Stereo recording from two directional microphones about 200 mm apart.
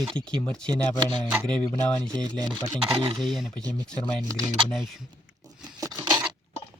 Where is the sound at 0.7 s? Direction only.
20° right (ahead or behind).